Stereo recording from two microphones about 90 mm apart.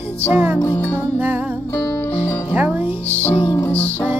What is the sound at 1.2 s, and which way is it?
Music, 20° right (ahead or behind).